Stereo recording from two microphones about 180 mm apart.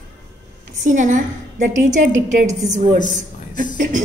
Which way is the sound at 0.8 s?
45° right (ahead or behind).